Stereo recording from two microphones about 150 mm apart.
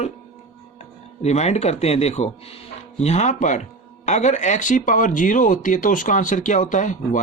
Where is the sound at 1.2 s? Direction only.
50° left (ahead or behind).